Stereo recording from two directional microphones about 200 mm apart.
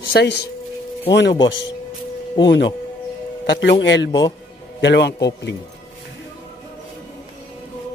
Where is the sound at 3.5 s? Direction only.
65° left (ahead or behind).